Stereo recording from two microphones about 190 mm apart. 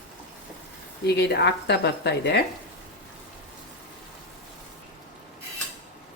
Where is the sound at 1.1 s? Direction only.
60° left (ahead or behind).